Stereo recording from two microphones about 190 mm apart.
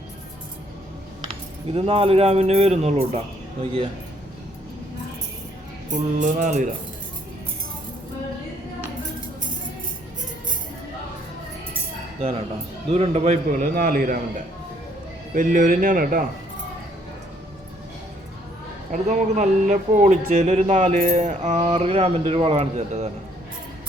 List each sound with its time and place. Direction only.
1.6 s speech: 30° right (ahead or behind)
5.9 s speech: 40° right (ahead or behind)
12.9 s a man's voice: 35° right (ahead or behind)
15.4 s a man's voice: 45° right (ahead or behind)
18.9 s speech: 40° right (ahead or behind)